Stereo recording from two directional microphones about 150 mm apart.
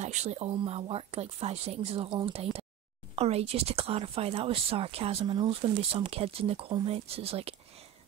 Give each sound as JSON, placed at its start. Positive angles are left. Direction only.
{"t": 0.0, "sound": "speech", "side_deg": -50}